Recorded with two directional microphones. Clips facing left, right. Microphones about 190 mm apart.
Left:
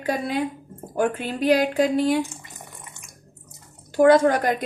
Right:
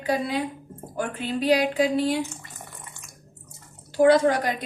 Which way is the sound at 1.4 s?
50° left (ahead or behind).